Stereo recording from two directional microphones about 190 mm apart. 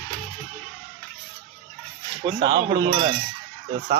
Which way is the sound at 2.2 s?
25° right (ahead or behind).